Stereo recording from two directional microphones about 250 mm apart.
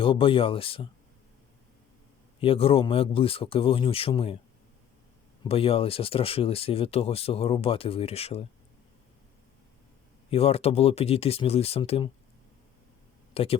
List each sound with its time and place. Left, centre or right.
0.0 s speech: left
2.4 s speech: left
5.4 s speech: left
10.2 s speech: left
13.3 s speech: left